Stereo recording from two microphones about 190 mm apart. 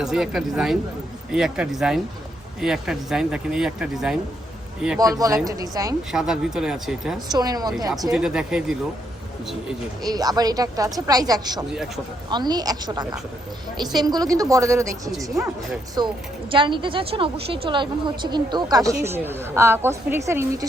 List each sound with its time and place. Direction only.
0.0 s speech: 5° right (ahead or behind)
4.9 s a woman's voice: 20° right (ahead or behind)
6.1 s speech: 5° right (ahead or behind)
7.3 s a woman's voice: 20° right (ahead or behind)
8.1 s speech: 5° right (ahead or behind)
10.0 s a woman's voice: 20° right (ahead or behind)
16.5 s a woman's voice: 25° right (ahead or behind)